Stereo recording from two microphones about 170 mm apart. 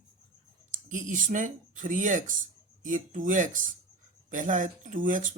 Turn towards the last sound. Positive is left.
turn(degrees=-50)  # may be behind; listen again after turning